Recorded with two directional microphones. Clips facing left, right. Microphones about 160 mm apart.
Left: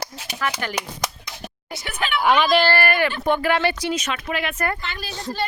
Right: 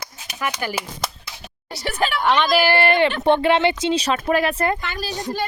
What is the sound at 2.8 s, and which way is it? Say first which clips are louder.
Speech: right 4 dB; 25° right (ahead or behind).